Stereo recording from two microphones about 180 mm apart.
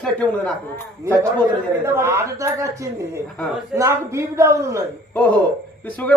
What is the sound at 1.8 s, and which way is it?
A woman's voice, 15° right (ahead or behind).